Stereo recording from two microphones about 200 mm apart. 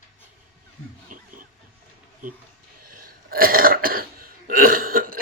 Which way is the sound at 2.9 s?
45° right (ahead or behind).